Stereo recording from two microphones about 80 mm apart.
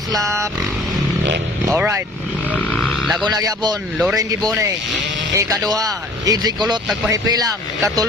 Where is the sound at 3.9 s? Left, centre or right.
Centre.